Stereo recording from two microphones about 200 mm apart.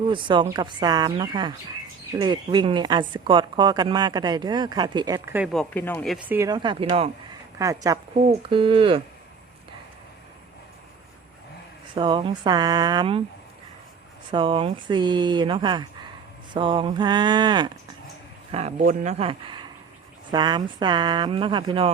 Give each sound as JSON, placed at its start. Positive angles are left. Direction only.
{"t": 0.1, "sound": "a woman's voice", "side_deg": -25}
{"t": 5.5, "sound": "speech", "side_deg": 5}
{"t": 6.1, "sound": "a woman's voice", "side_deg": -5}
{"t": 7.6, "sound": "a woman's voice", "side_deg": -15}
{"t": 11.9, "sound": "a woman's voice", "side_deg": -25}
{"t": 14.3, "sound": "a woman's voice", "side_deg": -25}
{"t": 18.5, "sound": "a woman's voice", "side_deg": -35}